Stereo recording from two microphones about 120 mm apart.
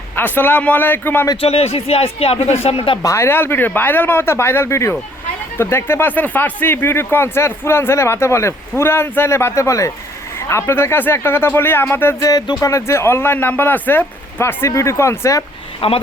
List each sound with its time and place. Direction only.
0.2 s a man's voice: 15° left (ahead or behind)
1.4 s speech: 60° left (ahead or behind)
3.0 s speech: 25° left (ahead or behind)
12.3 s speech: 30° left (ahead or behind)
15.8 s speech: 50° left (ahead or behind)